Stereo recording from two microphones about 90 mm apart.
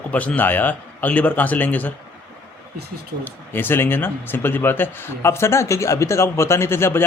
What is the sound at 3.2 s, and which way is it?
A man's voice, 25° left (ahead or behind).